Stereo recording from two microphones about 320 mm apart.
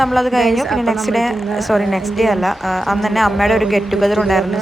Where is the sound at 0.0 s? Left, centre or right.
Centre.